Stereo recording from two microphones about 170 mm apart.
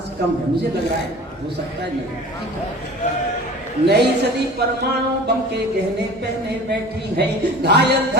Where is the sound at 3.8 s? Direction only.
80° right.